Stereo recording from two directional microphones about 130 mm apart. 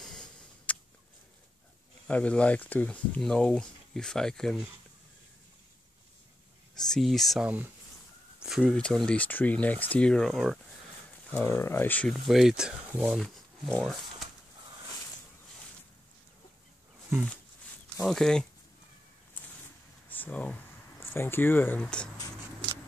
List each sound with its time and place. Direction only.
0.7 s a sound: 10° left (ahead or behind)
2.0 s speech: 10° left (ahead or behind)
6.9 s speech: centre (ahead or behind)
7.4 s speech: 15° right (ahead or behind)
8.5 s speech: 5° right (ahead or behind)
11.3 s speech: 20° left (ahead or behind)
12.3 s speech: centre (ahead or behind)
18.0 s speech: 5° left (ahead or behind)
20.1 s speech: 10° left (ahead or behind)